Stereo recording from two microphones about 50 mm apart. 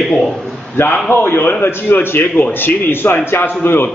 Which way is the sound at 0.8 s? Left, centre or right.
Left.